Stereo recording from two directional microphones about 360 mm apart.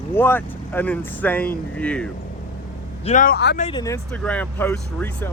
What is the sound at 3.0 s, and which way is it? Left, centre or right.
Speech, left.